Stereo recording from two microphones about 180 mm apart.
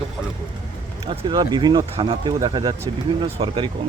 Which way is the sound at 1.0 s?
25° right (ahead or behind).